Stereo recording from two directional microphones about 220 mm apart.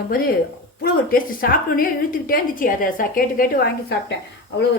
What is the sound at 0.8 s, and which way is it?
A woman's voice, 40° left (ahead or behind).